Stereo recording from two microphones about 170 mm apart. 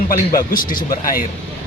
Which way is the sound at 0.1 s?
55° left (ahead or behind).